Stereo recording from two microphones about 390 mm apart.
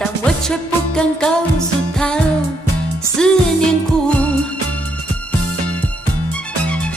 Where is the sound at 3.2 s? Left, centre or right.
Centre.